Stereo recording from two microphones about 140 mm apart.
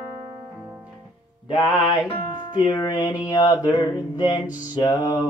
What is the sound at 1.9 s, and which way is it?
Music, 30° left (ahead or behind).